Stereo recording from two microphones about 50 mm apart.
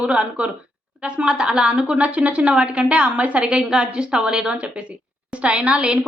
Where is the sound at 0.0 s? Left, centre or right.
Right.